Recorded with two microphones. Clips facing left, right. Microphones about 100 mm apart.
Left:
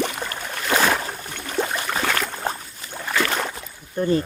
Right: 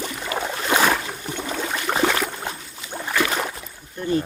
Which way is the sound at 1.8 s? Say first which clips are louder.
Right 4 dB; 25° right (ahead or behind).